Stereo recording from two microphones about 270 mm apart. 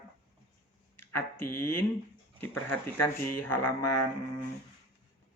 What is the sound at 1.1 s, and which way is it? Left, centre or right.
Speech, centre.